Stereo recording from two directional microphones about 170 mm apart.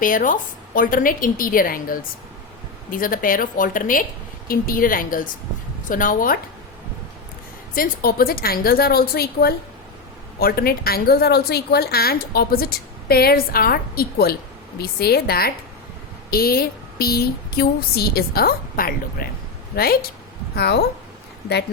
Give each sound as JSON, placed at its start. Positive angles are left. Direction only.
{"t": 0.0, "sound": "speech", "side_deg": 50}
{"t": 7.8, "sound": "speech", "side_deg": 60}
{"t": 20.6, "sound": "a woman's voice", "side_deg": 75}